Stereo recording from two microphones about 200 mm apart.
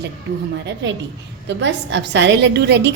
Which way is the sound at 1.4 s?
65° right (ahead or behind).